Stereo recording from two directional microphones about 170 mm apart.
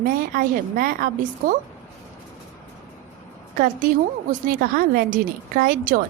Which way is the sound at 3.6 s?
55° right (ahead or behind).